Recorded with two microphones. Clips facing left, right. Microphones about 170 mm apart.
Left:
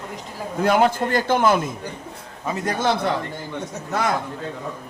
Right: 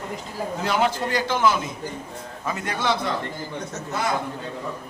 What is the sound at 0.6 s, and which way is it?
A man's voice, 50° left (ahead or behind).